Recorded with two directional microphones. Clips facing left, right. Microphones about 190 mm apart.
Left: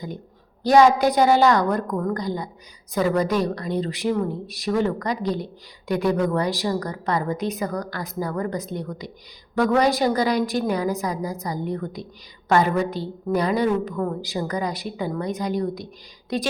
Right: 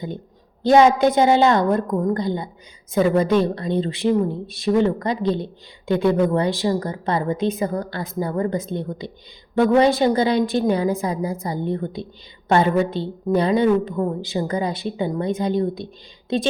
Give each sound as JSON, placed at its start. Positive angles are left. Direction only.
{"t": 0.6, "sound": "a woman's voice", "side_deg": -25}